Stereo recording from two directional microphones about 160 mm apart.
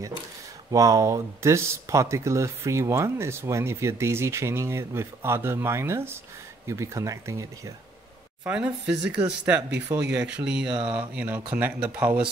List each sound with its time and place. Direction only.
0.7 s speech: 20° right (ahead or behind)
8.5 s speech: 5° right (ahead or behind)